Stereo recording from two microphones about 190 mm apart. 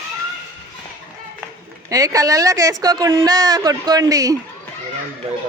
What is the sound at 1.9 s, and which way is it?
Speech, 20° right (ahead or behind).